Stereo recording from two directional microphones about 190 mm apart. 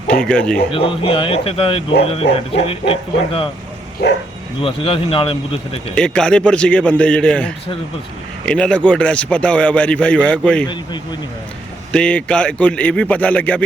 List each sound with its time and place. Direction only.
0.1 s a man's voice: 5° left (ahead or behind)
0.7 s speech: 30° left (ahead or behind)
4.0 s speech: 55° left (ahead or behind)
4.6 s speech: 30° left (ahead or behind)
5.9 s a man's voice: 5° left (ahead or behind)
11.9 s a man's voice: 5° left (ahead or behind)